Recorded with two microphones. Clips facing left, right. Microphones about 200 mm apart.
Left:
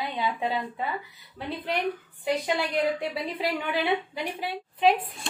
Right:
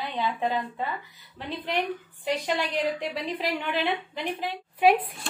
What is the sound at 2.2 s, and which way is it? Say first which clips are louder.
A woman's voice: left 1 dB; 10° left (ahead or behind).